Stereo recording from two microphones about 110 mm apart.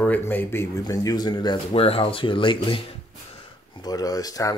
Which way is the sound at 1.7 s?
60° left (ahead or behind).